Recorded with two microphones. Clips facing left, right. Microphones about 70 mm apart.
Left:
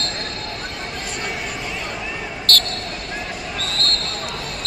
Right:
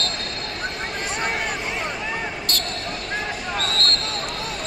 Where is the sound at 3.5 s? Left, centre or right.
Right.